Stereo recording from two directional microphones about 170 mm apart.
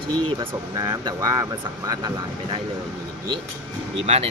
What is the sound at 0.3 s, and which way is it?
Speech, 25° right (ahead or behind).